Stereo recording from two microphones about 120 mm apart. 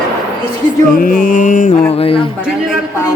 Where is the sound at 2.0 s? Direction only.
50° left (ahead or behind).